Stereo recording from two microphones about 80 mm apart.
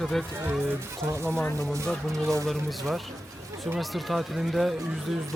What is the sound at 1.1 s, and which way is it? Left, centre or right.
Speech, right.